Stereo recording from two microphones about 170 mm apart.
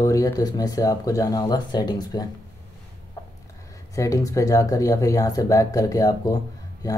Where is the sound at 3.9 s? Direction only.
20° left (ahead or behind).